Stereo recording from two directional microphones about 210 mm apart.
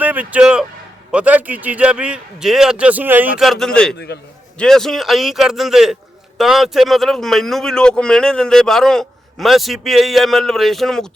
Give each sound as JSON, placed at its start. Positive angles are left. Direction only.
{"t": 0.0, "sound": "a man's voice", "side_deg": -5}
{"t": 3.9, "sound": "a man's voice", "side_deg": 50}
{"t": 4.5, "sound": "a man's voice", "side_deg": 5}